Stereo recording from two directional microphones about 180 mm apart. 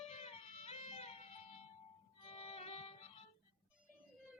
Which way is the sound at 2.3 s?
35° left (ahead or behind).